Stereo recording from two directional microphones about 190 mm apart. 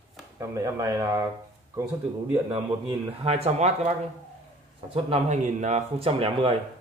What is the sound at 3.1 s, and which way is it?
Speech, 30° right (ahead or behind).